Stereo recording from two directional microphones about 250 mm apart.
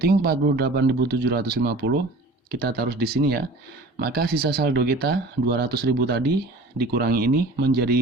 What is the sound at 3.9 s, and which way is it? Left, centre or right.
Speech, right.